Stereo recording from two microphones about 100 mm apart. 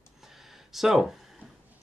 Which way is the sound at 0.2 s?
Centre (ahead or behind).